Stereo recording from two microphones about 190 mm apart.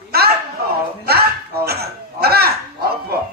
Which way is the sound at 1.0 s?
55° right (ahead or behind).